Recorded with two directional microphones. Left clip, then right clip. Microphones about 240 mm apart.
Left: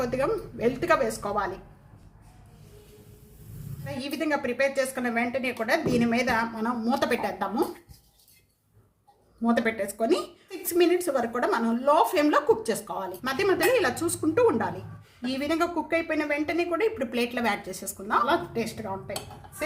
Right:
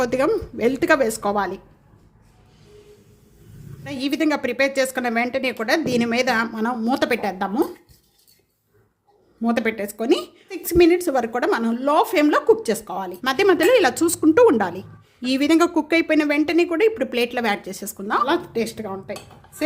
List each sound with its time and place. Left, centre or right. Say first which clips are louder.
0.0 s a woman's voice: right 7 dB; right
3.8 s a woman's voice: right 7 dB; right
9.4 s a woman's voice: right 3 dB; right